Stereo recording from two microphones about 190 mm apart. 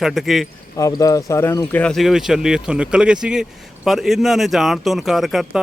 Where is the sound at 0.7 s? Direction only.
20° left (ahead or behind).